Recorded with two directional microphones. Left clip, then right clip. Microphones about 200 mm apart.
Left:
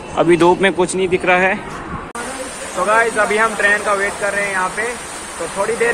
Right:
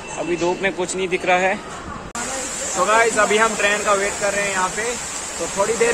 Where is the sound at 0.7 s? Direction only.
5° left (ahead or behind).